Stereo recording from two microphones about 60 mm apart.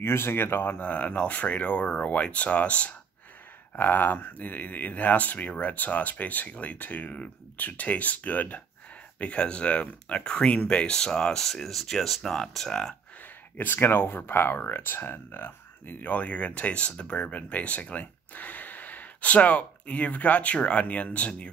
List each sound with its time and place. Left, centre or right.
0.0 s speech: left
3.7 s speech: left; by 12.9 s centre
13.6 s speech: left